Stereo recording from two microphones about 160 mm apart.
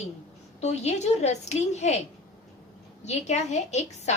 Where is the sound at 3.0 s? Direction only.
45° left (ahead or behind).